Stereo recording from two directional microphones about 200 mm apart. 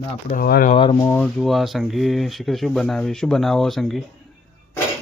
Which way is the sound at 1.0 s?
5° left (ahead or behind).